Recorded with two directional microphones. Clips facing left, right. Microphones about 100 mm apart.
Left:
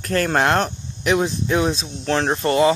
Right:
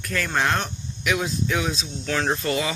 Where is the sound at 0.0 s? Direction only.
50° left (ahead or behind).